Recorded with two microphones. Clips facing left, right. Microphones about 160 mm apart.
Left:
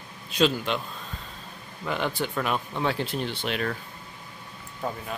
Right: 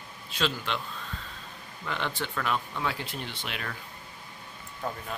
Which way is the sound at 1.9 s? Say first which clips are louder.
Left 5 dB; 10° left (ahead or behind).